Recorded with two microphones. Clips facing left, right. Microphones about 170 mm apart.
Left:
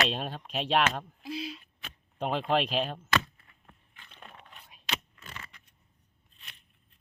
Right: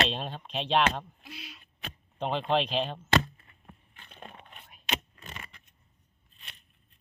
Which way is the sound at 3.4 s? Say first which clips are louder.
Right 5 dB; 25° right (ahead or behind).